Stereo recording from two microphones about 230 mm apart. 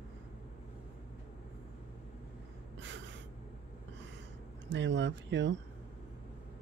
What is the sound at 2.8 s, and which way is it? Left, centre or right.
Gasp, right.